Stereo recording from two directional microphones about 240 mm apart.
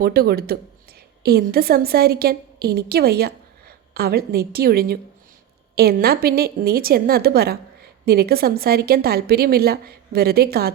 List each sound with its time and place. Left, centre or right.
0.0 s a woman's voice: right